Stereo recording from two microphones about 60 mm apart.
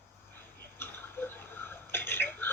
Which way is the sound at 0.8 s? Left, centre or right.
Left.